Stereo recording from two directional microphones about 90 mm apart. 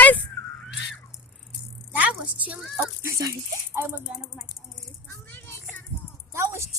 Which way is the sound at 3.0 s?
35° right (ahead or behind).